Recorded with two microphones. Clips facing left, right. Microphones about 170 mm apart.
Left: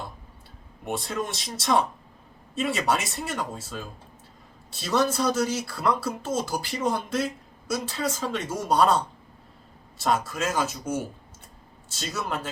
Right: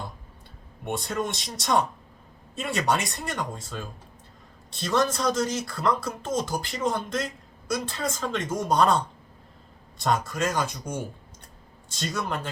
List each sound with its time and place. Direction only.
0.9 s speech: centre (ahead or behind)
10.0 s speech: 5° left (ahead or behind)